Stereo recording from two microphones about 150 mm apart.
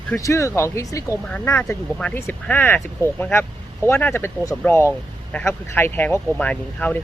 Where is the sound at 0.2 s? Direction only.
20° left (ahead or behind).